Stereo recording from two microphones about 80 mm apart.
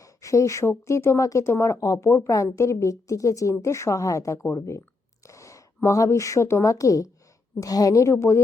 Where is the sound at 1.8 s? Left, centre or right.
Left.